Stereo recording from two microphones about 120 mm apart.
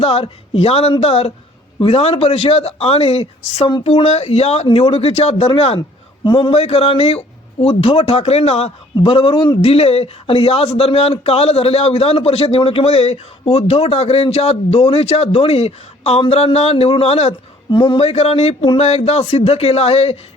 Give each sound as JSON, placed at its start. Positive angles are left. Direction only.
{"t": 0.0, "sound": "a man's voice", "side_deg": 50}
{"t": 17.7, "sound": "speech", "side_deg": 40}
{"t": 18.0, "sound": "a man's voice", "side_deg": 60}
{"t": 18.8, "sound": "a man's voice", "side_deg": 60}